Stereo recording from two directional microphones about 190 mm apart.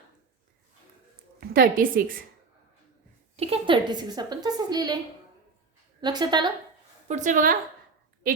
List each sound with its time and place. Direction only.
1.4 s a woman's voice: 50° right (ahead or behind)
3.3 s a woman's voice: 30° right (ahead or behind)
6.0 s a woman's voice: 20° right (ahead or behind)
7.1 s a woman's voice: 40° right (ahead or behind)